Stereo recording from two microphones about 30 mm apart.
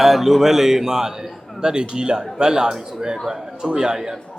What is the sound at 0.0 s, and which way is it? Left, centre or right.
A man's voice, centre.